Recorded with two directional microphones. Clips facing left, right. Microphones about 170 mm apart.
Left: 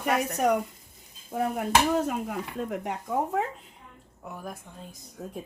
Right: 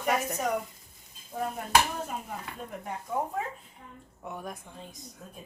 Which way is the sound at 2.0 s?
80° left.